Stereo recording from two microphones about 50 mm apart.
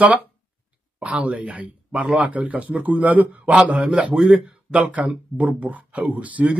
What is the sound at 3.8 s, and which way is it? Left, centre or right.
Speech, centre.